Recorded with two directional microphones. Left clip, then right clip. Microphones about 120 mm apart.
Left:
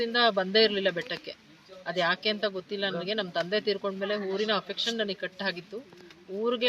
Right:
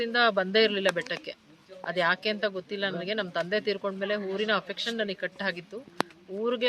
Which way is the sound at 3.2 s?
5° left (ahead or behind).